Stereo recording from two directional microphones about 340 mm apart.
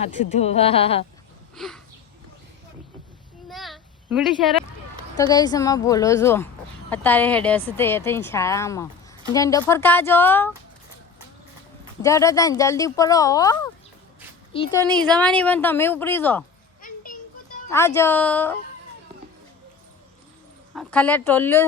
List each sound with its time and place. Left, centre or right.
0.0 s speech: centre
1.5 s a sound: centre
3.5 s a sound: centre
5.1 s a woman's voice: centre
12.0 s a woman's voice: centre
16.8 s children playing: left
17.7 s speech: centre
20.7 s a woman's voice: centre